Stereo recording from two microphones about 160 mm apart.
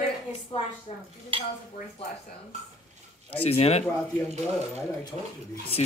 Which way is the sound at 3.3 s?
40° left (ahead or behind).